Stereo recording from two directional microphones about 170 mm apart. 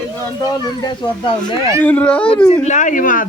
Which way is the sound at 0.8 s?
25° left (ahead or behind).